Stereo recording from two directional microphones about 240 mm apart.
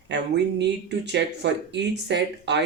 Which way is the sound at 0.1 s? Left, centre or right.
Right.